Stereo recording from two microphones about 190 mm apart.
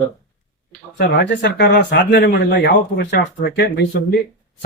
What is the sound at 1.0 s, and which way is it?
Speech, 65° left (ahead or behind).